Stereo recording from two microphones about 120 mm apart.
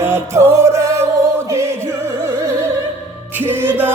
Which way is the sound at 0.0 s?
20° right (ahead or behind).